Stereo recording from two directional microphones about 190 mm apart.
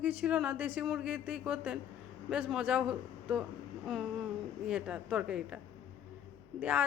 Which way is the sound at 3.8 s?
Centre (ahead or behind).